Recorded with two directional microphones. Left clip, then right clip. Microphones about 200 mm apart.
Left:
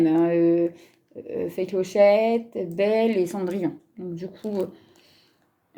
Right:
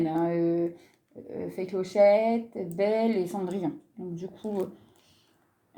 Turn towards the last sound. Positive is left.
turn(degrees=25)  # may be behind; listen again after turning